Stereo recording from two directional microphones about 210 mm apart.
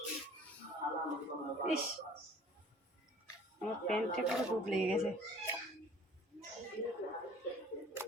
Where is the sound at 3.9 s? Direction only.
Centre (ahead or behind).